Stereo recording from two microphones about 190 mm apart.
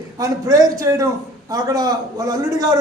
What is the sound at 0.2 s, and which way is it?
A man's voice, 20° right (ahead or behind).